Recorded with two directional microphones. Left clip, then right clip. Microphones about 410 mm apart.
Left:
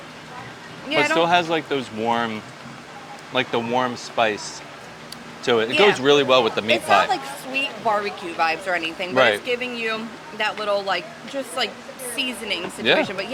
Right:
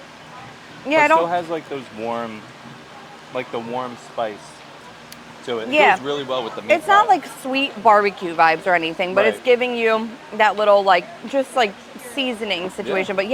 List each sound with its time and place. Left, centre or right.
0.9 s speech: right
1.2 s speech: left
3.3 s speech: left
5.7 s a woman's voice: right
6.1 s speech: left
7.1 s a woman's voice: right